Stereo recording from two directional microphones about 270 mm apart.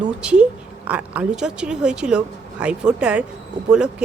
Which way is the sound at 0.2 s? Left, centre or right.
Centre.